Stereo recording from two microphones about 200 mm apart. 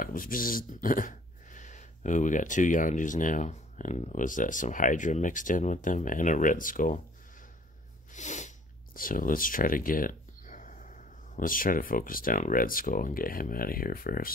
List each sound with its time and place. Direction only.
0.0 s speech: 45° left (ahead or behind)
8.1 s speech: 35° left (ahead or behind)